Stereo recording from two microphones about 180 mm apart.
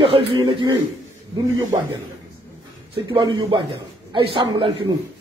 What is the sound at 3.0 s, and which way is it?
A man's voice, 25° right (ahead or behind).